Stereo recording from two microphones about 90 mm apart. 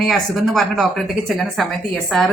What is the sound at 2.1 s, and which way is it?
Speech, 5° left (ahead or behind).